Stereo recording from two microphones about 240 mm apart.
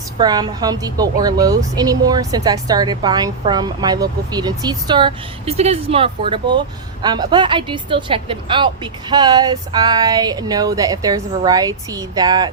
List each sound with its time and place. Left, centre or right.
0.2 s a woman's voice: centre